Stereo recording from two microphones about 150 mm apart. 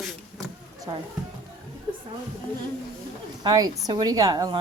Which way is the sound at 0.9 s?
30° right (ahead or behind).